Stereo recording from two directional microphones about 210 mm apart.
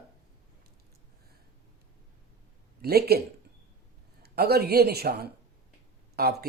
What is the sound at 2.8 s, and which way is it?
Speech, 50° right (ahead or behind).